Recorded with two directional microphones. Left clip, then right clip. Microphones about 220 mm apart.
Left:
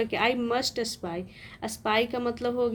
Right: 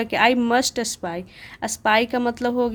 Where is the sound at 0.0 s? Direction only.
35° right (ahead or behind).